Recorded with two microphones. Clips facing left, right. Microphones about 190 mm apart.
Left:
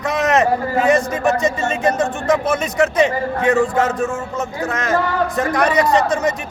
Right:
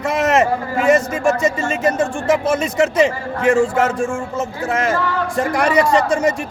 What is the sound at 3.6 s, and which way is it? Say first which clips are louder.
Speech: right 1 dB; 10° right (ahead or behind).